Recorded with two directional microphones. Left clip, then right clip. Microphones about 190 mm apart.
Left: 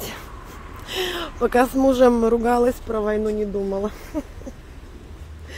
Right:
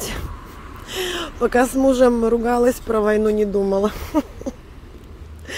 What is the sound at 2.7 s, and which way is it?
Speech, 15° right (ahead or behind).